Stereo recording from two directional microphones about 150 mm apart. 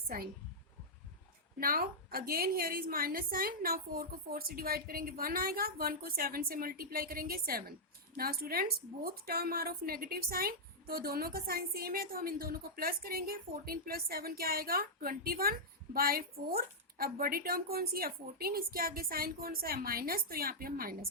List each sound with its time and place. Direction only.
1.5 s a woman's voice: 80° right